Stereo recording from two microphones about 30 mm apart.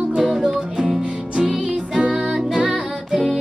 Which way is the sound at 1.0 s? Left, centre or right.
Right.